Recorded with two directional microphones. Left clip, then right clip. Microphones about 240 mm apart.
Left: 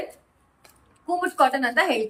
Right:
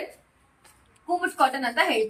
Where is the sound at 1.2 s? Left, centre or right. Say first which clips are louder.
Left 3 dB; centre.